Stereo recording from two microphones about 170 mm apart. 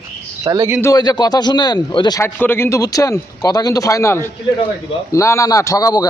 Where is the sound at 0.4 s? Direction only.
20° right (ahead or behind).